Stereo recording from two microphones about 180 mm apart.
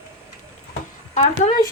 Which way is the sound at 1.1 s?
40° left (ahead or behind).